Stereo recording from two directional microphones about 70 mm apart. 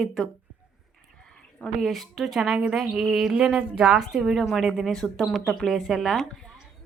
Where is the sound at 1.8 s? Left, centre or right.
Centre.